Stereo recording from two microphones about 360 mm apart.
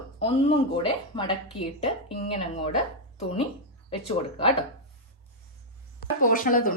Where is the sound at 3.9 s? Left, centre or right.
Centre.